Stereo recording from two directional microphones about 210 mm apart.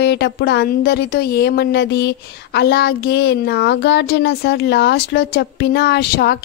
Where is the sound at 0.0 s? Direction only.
55° left (ahead or behind).